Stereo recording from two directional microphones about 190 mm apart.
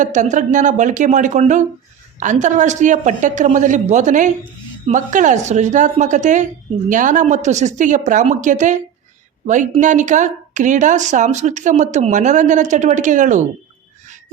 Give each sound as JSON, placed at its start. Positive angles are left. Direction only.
{"t": 0.0, "sound": "speech", "side_deg": -40}